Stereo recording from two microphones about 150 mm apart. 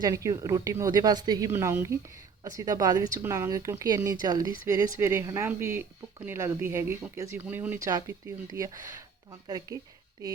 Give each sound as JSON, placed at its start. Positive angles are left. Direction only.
{"t": 0.0, "sound": "speech", "side_deg": -20}
{"t": 1.5, "sound": "speech", "side_deg": -15}